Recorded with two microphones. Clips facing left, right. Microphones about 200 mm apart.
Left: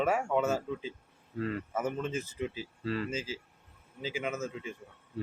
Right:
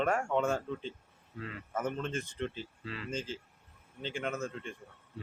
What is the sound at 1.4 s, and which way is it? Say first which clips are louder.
Speech: left 9 dB; 45° left (ahead or behind).